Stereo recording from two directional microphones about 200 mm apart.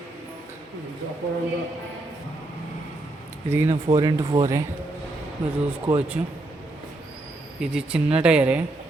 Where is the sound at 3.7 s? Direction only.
30° right (ahead or behind).